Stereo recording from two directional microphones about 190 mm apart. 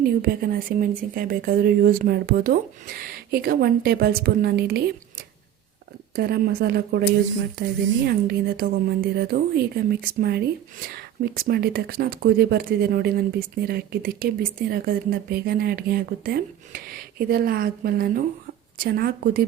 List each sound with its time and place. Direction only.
0.2 s a woman's voice: 50° right (ahead or behind)
8.0 s a woman's voice: 55° right (ahead or behind)